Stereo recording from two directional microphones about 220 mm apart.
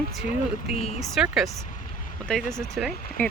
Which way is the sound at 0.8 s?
30° left (ahead or behind).